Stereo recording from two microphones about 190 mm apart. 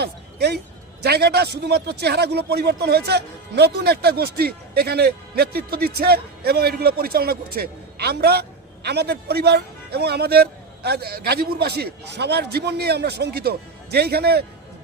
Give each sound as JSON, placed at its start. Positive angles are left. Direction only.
{"t": 0.0, "sound": "music", "side_deg": -60}
{"t": 1.0, "sound": "speech", "side_deg": -60}